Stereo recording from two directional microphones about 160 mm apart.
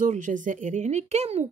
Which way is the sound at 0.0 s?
55° right (ahead or behind).